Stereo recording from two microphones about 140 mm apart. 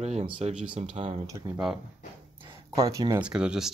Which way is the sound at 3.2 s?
5° right (ahead or behind).